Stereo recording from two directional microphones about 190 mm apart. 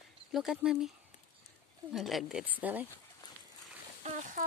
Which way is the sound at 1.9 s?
Centre (ahead or behind).